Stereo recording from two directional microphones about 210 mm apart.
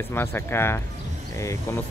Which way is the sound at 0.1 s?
10° left (ahead or behind).